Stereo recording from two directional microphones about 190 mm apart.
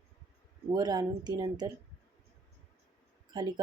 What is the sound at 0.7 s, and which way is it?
Speech, 20° right (ahead or behind).